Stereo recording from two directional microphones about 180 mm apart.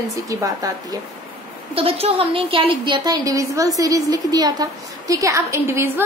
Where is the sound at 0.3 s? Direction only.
20° right (ahead or behind).